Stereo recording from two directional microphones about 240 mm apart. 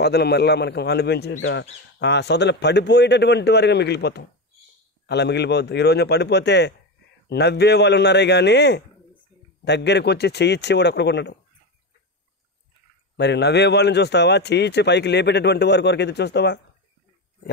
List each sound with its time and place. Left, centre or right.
0.0 s a man's voice: left
13.1 s a man's voice: left